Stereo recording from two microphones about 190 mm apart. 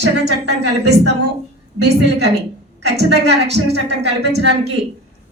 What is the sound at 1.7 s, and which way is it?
A woman's voice, 65° right (ahead or behind).